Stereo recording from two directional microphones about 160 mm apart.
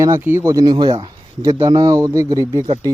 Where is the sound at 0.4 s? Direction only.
25° right (ahead or behind).